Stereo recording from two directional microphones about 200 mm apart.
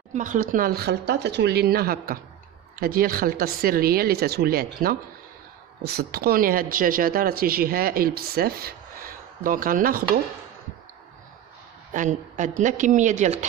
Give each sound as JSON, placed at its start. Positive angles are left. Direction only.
{"t": 0.1, "sound": "speech", "side_deg": -40}
{"t": 11.9, "sound": "a woman's voice", "side_deg": -40}